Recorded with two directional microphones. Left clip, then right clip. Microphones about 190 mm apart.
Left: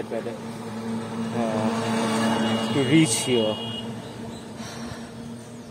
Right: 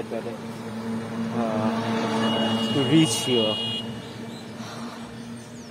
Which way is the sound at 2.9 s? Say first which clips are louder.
Even; 10° left (ahead or behind).